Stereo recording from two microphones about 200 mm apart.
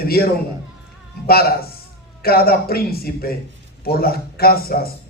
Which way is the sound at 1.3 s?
50° left (ahead or behind).